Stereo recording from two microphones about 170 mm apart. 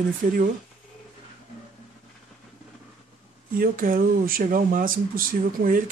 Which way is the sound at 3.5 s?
55° right (ahead or behind).